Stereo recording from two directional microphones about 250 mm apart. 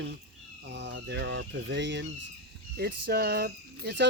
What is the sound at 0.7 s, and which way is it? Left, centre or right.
Speech, right.